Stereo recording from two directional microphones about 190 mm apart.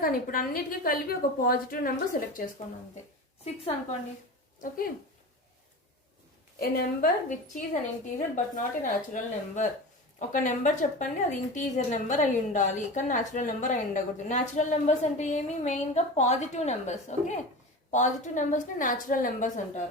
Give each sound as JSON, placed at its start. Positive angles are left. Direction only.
{"t": 0.0, "sound": "a woman's voice", "side_deg": 50}
{"t": 3.4, "sound": "a woman's voice", "side_deg": 35}
{"t": 6.6, "sound": "a woman's voice", "side_deg": 50}